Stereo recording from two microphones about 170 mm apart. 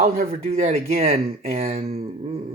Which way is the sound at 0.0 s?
40° right (ahead or behind).